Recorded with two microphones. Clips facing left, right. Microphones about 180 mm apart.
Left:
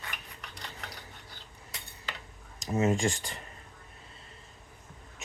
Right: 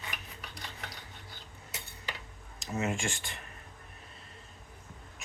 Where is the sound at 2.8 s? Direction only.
35° left (ahead or behind).